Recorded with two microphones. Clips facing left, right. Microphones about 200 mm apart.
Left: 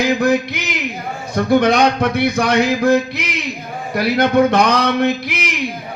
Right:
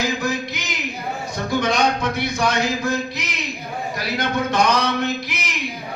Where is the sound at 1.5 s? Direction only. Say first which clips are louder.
Left 7 dB; 60° left (ahead or behind).